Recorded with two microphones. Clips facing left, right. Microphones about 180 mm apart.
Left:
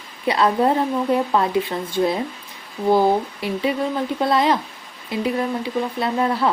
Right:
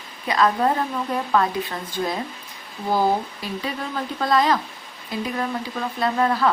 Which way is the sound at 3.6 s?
20° left (ahead or behind).